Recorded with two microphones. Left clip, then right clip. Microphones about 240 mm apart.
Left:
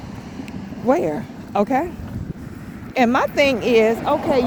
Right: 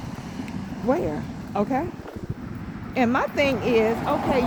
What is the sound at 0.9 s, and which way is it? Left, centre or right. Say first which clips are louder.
Speech: left 6 dB; left.